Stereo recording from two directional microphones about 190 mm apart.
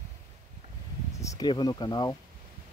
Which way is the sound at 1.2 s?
20° left (ahead or behind).